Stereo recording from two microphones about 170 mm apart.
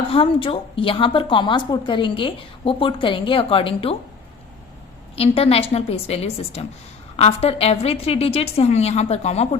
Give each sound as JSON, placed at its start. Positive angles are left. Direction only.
{"t": 0.1, "sound": "a woman's voice", "side_deg": 30}
{"t": 5.1, "sound": "a woman's voice", "side_deg": 35}